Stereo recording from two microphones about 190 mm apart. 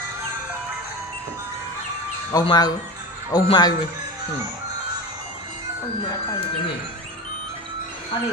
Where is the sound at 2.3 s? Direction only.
20° left (ahead or behind).